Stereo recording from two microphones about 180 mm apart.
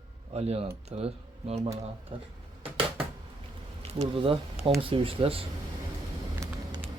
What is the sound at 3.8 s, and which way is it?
Speech, 30° right (ahead or behind).